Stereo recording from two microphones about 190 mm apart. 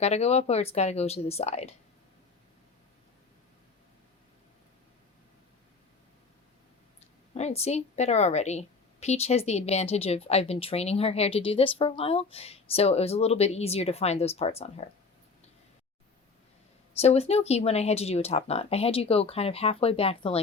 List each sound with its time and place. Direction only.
0.0 s a woman's voice: 35° left (ahead or behind)
7.3 s a woman's voice: 35° left (ahead or behind)
17.0 s a woman's voice: 35° left (ahead or behind)